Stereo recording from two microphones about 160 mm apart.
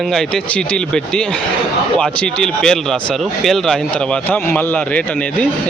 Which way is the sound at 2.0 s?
5° left (ahead or behind).